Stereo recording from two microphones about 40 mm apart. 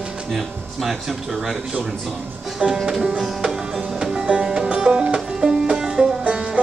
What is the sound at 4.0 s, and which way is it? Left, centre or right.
Music, centre.